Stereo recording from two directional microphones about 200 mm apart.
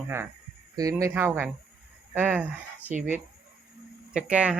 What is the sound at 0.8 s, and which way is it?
Speech, 15° right (ahead or behind).